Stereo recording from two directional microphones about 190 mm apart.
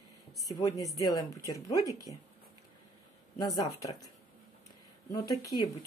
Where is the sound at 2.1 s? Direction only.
35° left (ahead or behind).